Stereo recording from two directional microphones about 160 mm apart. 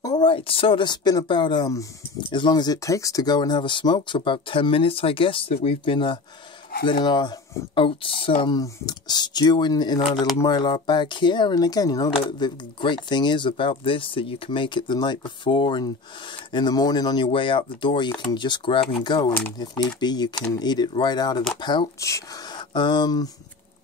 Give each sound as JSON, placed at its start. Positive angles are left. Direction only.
{"t": 0.0, "sound": "speech", "side_deg": 25}